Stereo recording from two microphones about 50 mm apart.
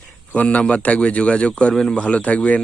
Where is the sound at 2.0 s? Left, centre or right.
Left.